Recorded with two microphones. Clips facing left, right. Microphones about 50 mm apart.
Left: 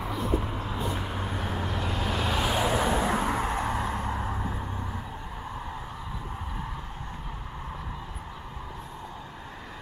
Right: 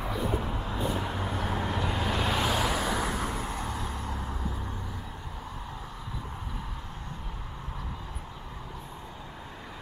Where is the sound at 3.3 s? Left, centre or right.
Left.